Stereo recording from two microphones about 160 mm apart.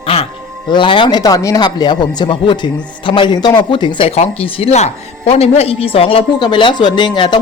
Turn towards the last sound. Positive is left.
turn(degrees=30)  # may be behind; listen again after turning